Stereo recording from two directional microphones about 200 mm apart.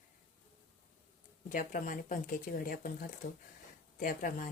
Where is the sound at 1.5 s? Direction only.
40° left (ahead or behind).